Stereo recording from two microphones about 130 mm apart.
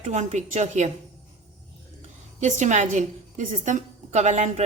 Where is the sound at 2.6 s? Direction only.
70° right (ahead or behind).